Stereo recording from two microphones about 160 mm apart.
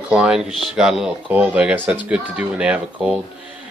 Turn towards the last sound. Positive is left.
turn(degrees=-5)  # may be behind; listen again after turning